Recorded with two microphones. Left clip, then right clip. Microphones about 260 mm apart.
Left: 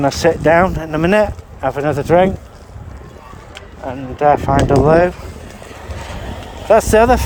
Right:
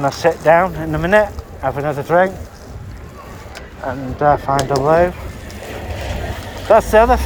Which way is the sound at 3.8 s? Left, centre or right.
Left.